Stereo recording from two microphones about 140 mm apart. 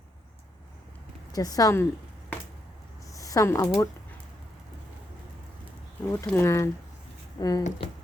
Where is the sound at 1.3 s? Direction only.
25° left (ahead or behind).